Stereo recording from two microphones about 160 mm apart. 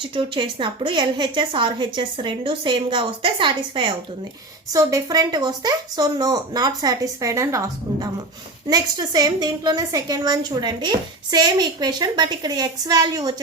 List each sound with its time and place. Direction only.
0.1 s a woman's voice: 30° right (ahead or behind)